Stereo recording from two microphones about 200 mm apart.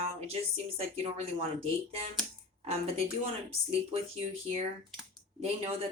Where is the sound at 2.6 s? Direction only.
30° right (ahead or behind).